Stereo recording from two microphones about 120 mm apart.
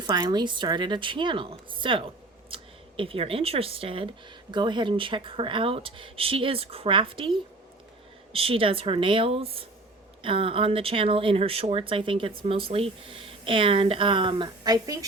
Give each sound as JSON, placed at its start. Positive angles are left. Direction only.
{"t": 0.0, "sound": "a woman's voice", "side_deg": -35}